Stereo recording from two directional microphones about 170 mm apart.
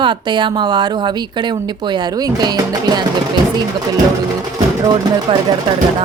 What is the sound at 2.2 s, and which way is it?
Speech, 25° right (ahead or behind).